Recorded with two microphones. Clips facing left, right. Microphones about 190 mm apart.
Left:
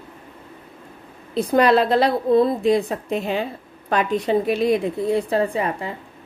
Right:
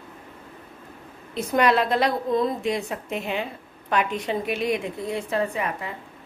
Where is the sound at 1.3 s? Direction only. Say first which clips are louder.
Left 5 dB; 35° left (ahead or behind).